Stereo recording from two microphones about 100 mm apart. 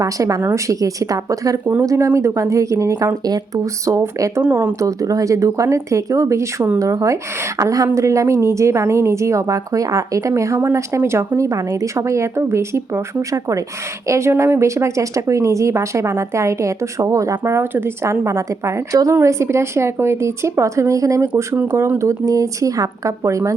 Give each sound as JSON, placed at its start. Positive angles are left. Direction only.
{"t": 0.0, "sound": "speech", "side_deg": -35}
{"t": 21.5, "sound": "speech", "side_deg": -15}
{"t": 21.9, "sound": "speech", "side_deg": -30}